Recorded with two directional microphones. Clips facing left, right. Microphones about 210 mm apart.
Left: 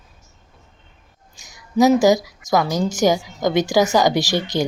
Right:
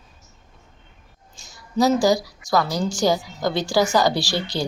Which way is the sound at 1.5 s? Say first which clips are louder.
Left 4 dB; 20° left (ahead or behind).